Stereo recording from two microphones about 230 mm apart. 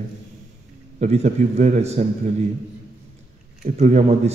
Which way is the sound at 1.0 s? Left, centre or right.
Right.